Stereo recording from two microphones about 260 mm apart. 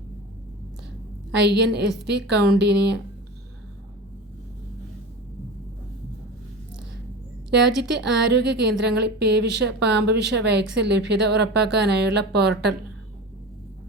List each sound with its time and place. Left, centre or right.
1.4 s a woman's voice: right
7.8 s a woman's voice: right